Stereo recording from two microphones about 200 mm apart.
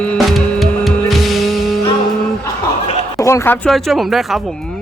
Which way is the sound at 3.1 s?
15° left (ahead or behind).